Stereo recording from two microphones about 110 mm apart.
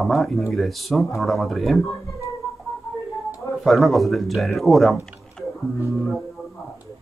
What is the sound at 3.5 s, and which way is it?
Speech, centre (ahead or behind).